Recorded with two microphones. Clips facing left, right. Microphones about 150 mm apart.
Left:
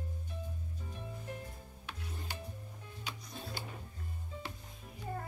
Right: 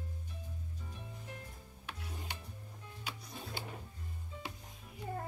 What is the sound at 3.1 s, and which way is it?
Music, 5° right (ahead or behind).